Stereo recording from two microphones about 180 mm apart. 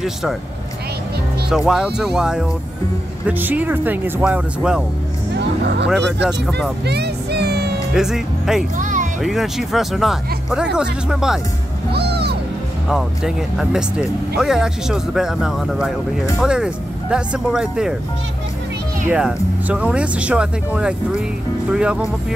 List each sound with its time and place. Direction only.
0.0 s speech: centre (ahead or behind)
1.7 s speech: 5° right (ahead or behind)
5.4 s music: 70° right (ahead or behind)
7.9 s speech: 5° right (ahead or behind)
8.7 s music: 45° right (ahead or behind)
9.2 s speech: centre (ahead or behind)
11.9 s music: 65° right (ahead or behind)
12.8 s speech: centre (ahead or behind)
19.0 s speech: 5° right (ahead or behind)